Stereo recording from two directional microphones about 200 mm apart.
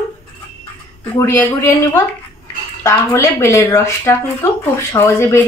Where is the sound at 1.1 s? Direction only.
10° left (ahead or behind).